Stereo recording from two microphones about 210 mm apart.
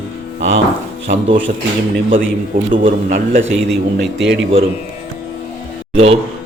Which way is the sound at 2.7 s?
40° right (ahead or behind).